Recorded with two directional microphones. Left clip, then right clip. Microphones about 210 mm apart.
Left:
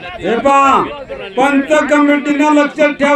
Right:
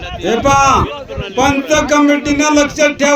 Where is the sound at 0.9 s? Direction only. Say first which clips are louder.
Right 1 dB; 50° right (ahead or behind).